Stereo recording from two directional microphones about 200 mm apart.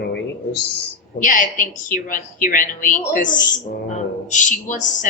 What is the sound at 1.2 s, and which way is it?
A woman's voice, 40° left (ahead or behind).